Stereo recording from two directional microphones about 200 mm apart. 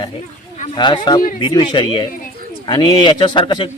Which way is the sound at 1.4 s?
20° left (ahead or behind).